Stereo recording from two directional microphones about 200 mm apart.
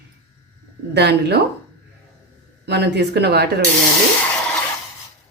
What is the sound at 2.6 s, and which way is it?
Speech, 55° right (ahead or behind).